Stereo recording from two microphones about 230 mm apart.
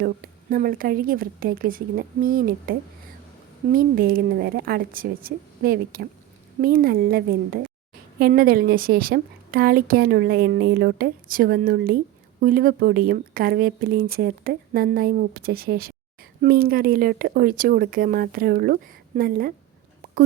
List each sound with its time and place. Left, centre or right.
0.5 s a woman's voice: right